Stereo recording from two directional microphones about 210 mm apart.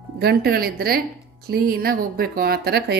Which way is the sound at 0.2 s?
50° right (ahead or behind).